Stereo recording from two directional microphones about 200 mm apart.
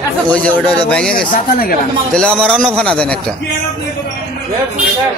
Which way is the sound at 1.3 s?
45° left (ahead or behind).